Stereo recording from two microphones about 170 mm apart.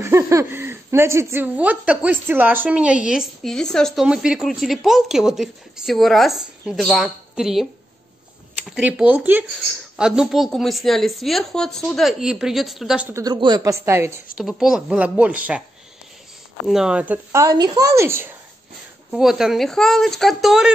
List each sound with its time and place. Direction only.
0.0 s speech: 15° right (ahead or behind)
8.6 s speech: 5° right (ahead or behind)
13.1 s a woman's voice: 25° right (ahead or behind)
14.6 s a woman's voice: 5° right (ahead or behind)
16.6 s a woman's voice: 5° right (ahead or behind)
19.0 s speech: 5° right (ahead or behind)